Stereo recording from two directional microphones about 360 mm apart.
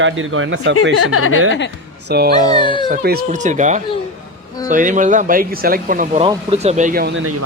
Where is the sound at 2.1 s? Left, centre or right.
Right.